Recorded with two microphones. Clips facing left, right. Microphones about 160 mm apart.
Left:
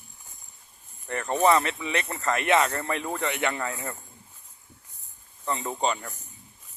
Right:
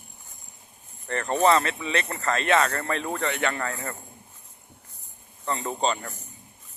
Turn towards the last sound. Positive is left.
turn(degrees=15)  # may be behind; listen again after turning